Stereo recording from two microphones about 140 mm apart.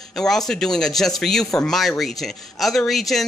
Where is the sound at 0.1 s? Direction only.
5° left (ahead or behind).